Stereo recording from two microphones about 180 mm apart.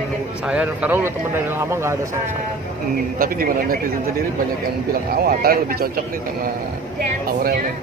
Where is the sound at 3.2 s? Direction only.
55° right (ahead or behind).